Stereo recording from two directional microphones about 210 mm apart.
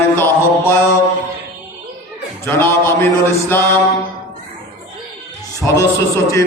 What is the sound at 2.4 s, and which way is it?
Speech, 10° left (ahead or behind).